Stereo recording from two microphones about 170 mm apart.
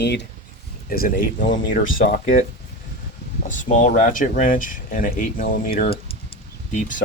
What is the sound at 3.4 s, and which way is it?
Speech, 50° left (ahead or behind).